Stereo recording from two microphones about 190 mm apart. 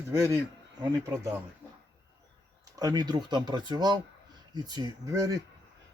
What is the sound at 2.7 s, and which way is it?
Speech, 20° right (ahead or behind).